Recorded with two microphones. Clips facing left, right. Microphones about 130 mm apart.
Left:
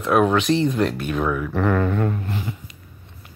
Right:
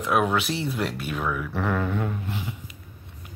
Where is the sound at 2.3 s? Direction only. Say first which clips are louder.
Left 4 dB; 10° right (ahead or behind).